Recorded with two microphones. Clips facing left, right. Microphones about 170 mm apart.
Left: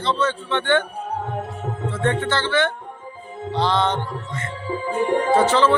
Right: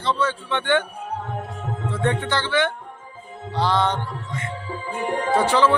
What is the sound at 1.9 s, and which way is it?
A man's voice, 15° right (ahead or behind).